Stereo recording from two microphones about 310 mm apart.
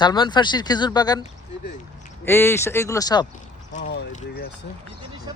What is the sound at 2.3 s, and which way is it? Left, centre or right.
Speech, centre.